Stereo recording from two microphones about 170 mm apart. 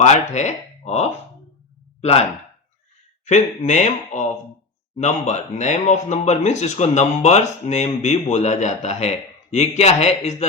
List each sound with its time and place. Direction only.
0.0 s speech: 45° left (ahead or behind)
3.2 s speech: 45° left (ahead or behind)